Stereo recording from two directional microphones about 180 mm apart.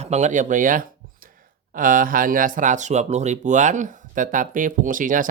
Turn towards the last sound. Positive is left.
turn(degrees=-50)  # may be behind; listen again after turning